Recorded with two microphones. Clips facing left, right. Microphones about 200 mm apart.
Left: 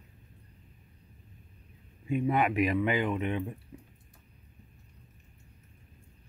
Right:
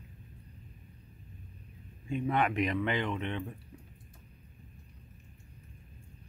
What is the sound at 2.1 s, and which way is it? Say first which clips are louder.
Speech: left 3 dB; 5° left (ahead or behind).